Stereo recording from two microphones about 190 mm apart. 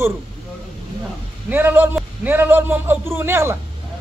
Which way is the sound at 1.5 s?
10° right (ahead or behind).